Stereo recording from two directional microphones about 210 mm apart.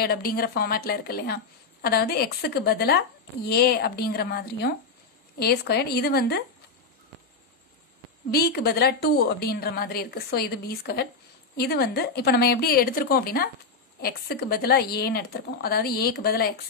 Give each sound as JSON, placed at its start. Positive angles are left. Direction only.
{"t": 0.0, "sound": "a woman's voice", "side_deg": 45}
{"t": 8.3, "sound": "a woman's voice", "side_deg": 50}